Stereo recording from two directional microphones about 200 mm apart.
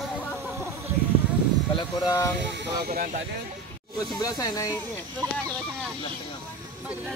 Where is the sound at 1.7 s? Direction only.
15° left (ahead or behind).